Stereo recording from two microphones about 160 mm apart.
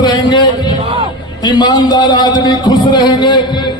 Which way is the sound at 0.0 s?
30° left (ahead or behind).